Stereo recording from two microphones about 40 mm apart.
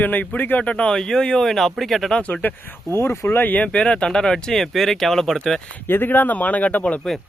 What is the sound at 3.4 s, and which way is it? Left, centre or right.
Speech, left.